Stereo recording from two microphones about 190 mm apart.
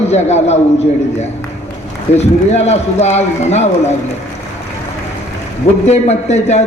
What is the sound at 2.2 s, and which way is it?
A man's voice, 35° left (ahead or behind).